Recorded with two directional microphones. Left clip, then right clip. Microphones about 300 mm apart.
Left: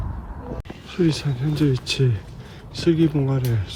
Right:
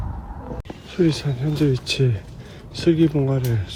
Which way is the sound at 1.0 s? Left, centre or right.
Centre.